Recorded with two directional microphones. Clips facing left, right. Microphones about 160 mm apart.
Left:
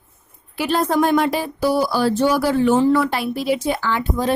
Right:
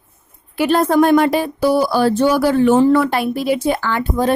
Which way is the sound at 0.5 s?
55° right (ahead or behind).